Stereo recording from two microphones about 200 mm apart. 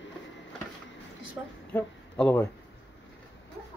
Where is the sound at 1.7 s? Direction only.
10° left (ahead or behind).